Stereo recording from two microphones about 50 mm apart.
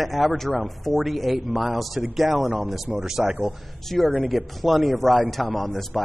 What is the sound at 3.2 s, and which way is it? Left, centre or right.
Speech, right.